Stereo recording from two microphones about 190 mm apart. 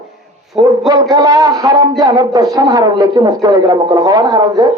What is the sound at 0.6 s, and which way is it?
Speech, 25° right (ahead or behind).